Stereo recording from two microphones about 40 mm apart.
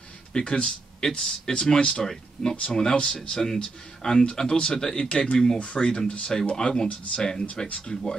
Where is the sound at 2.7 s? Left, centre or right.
Centre.